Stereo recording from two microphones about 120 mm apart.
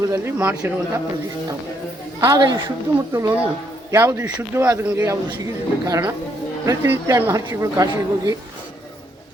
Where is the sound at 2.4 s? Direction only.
40° right (ahead or behind).